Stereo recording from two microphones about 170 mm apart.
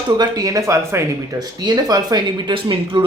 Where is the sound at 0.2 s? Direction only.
20° right (ahead or behind).